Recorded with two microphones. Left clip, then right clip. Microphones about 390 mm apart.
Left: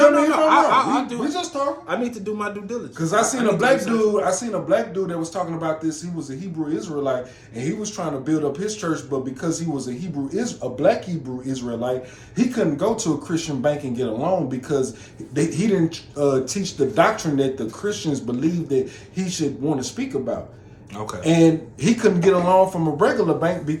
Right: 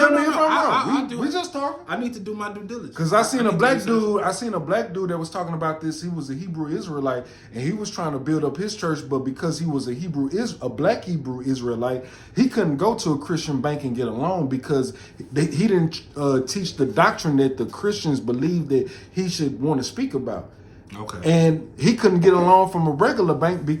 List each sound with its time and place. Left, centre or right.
0.3 s chuckle: centre
1.2 s speech: centre
1.9 s speech: centre
3.0 s speech: centre